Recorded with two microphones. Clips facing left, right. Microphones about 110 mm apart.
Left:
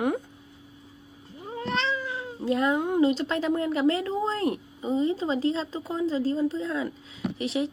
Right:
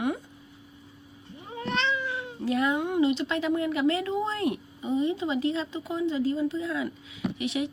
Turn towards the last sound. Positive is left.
turn(degrees=30)  # may be behind; listen again after turning